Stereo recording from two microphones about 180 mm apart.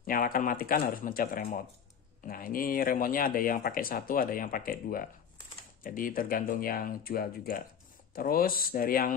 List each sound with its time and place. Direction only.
0.0 s speech: 50° left (ahead or behind)